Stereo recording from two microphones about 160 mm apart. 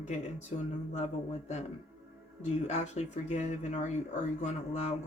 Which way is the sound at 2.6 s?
45° left (ahead or behind).